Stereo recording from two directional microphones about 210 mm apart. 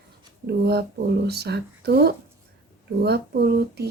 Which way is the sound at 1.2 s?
50° right (ahead or behind).